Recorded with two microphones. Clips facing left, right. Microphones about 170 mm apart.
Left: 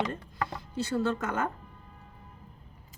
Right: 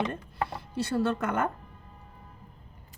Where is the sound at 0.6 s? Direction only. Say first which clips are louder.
Right 1 dB; 60° right (ahead or behind).